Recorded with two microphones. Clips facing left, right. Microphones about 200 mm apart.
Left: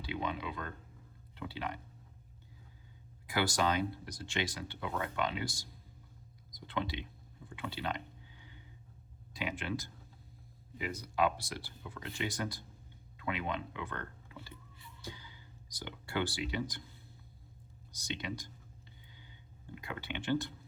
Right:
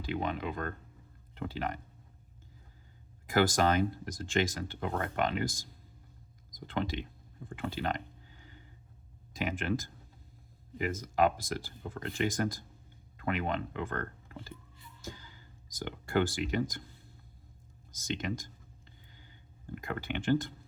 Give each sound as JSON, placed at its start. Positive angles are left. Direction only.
{"t": 0.0, "sound": "speech", "side_deg": -45}
{"t": 3.2, "sound": "speech", "side_deg": -50}
{"t": 6.6, "sound": "a sound", "side_deg": -45}
{"t": 9.3, "sound": "speech", "side_deg": -45}
{"t": 11.0, "sound": "speech", "side_deg": -45}
{"t": 17.9, "sound": "speech", "side_deg": -45}
{"t": 19.1, "sound": "a sound", "side_deg": -45}